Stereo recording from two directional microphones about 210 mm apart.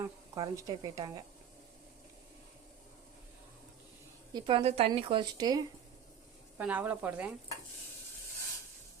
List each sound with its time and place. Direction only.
0.0 s speech: 15° right (ahead or behind)
4.4 s speech: 25° right (ahead or behind)
6.6 s speech: 5° right (ahead or behind)